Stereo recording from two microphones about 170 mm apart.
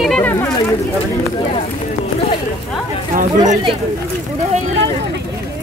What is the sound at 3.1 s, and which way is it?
Speech, 45° right (ahead or behind).